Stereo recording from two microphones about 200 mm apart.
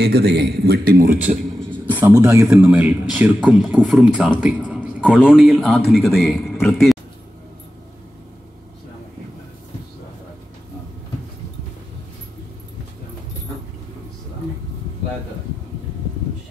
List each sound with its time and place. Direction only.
0.0 s a man's voice: 55° right (ahead or behind)
1.9 s a man's voice: 10° right (ahead or behind)
2.4 s speech: centre (ahead or behind)